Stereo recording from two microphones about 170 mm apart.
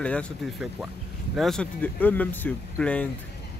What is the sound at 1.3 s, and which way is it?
Speech, centre (ahead or behind).